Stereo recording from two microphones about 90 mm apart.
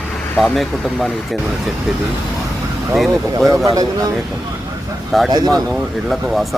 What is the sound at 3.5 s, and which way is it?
Speech, 40° right (ahead or behind).